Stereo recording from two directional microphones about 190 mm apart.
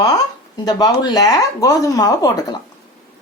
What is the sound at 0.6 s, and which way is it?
Speech, 20° left (ahead or behind).